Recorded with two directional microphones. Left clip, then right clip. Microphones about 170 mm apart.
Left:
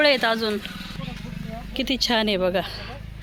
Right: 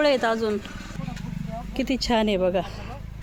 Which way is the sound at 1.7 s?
5° right (ahead or behind).